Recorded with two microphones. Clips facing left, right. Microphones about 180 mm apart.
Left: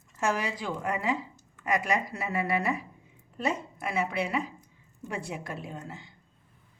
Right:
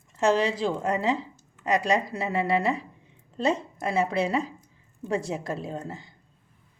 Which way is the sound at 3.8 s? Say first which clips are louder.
Right 5 dB; 30° right (ahead or behind).